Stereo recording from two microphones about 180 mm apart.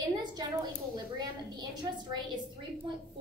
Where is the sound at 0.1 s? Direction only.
20° right (ahead or behind).